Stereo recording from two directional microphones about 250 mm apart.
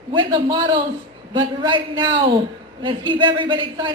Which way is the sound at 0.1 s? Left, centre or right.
Centre.